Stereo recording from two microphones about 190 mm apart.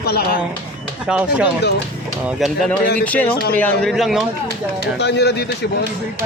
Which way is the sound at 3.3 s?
55° left (ahead or behind).